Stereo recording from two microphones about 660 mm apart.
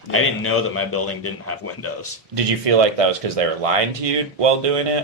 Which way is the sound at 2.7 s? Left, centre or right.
Right.